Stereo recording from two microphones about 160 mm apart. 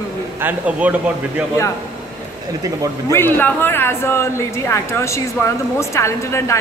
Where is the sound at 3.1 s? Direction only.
15° left (ahead or behind).